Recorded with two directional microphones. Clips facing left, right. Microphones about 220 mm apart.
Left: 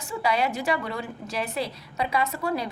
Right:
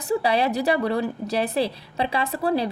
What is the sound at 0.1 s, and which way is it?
A woman's voice, 35° right (ahead or behind).